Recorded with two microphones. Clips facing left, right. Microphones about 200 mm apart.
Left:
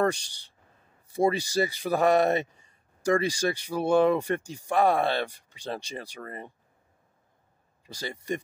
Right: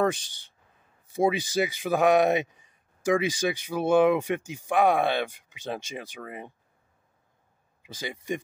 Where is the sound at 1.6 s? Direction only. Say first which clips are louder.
Right 1 dB; 5° right (ahead or behind).